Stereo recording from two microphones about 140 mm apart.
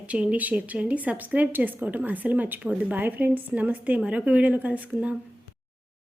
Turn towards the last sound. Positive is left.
turn(degrees=-10)  # may be behind; listen again after turning